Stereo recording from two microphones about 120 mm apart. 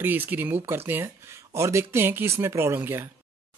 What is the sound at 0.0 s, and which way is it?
Speech, 15° right (ahead or behind).